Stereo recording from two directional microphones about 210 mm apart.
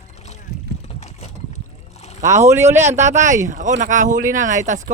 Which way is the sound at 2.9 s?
35° right (ahead or behind).